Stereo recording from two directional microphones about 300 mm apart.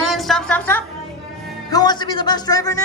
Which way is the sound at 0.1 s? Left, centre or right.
Centre.